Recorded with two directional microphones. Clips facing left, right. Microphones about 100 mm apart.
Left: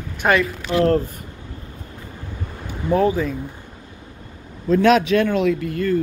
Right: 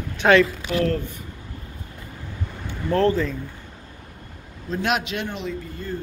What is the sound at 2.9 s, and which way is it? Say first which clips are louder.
Speech: left 2 dB; 10° left (ahead or behind).